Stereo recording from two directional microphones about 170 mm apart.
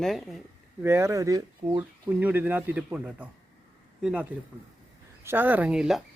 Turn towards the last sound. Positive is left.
turn(degrees=-5)  # may be behind; listen again after turning